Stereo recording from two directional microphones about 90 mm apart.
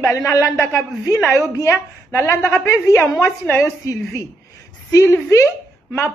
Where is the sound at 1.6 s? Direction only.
30° left (ahead or behind).